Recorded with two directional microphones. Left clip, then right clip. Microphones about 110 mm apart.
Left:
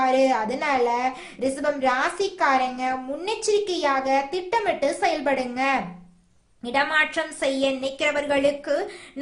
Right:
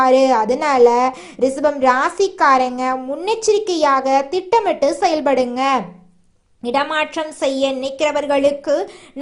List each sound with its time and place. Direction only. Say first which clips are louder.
0.0 s a woman's voice: right 7 dB; 55° right (ahead or behind)